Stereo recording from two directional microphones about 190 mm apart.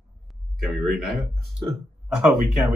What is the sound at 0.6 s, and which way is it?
Speech, centre (ahead or behind).